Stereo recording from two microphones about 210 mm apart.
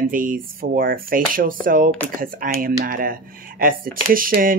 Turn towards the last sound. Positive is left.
turn(degrees=-40)  # may be behind; listen again after turning